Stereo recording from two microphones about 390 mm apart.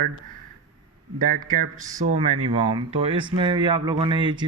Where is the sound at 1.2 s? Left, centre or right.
Right.